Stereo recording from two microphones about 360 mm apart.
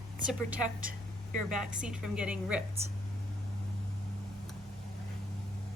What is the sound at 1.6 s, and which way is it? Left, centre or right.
A woman's voice, centre.